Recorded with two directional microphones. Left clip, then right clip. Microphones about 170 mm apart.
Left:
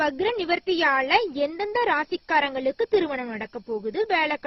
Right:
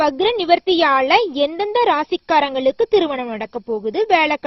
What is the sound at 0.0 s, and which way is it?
A woman's voice, 40° right (ahead or behind).